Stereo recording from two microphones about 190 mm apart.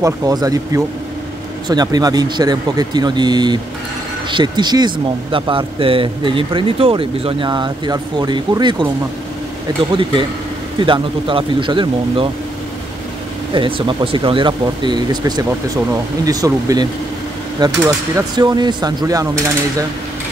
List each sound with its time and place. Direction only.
0.0 s speech: 20° right (ahead or behind)
10.8 s speech: 25° right (ahead or behind)
13.5 s speech: 25° right (ahead or behind)